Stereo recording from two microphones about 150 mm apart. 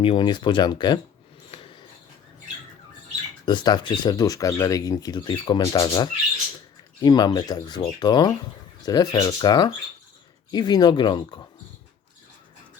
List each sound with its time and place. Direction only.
0.0 s speech: 35° left (ahead or behind)
1.5 s a sound: 40° left (ahead or behind)
3.4 s speech: 30° left (ahead or behind)